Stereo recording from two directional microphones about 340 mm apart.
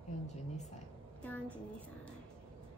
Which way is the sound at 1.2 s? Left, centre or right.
Centre.